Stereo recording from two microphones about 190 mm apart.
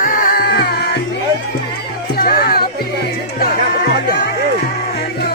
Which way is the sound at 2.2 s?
55° left (ahead or behind).